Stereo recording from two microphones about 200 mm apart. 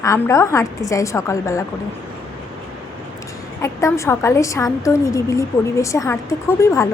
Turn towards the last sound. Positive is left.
turn(degrees=15)  # may be behind; listen again after turning